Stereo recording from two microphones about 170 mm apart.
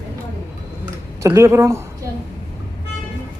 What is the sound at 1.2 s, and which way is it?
Speech, 15° right (ahead or behind).